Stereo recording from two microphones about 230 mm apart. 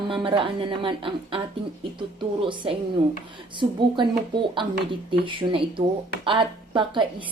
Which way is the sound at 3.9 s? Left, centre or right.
Right.